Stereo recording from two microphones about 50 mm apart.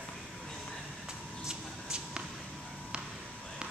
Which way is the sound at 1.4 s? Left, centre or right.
Centre.